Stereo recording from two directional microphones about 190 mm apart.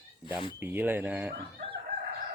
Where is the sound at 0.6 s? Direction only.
10° right (ahead or behind).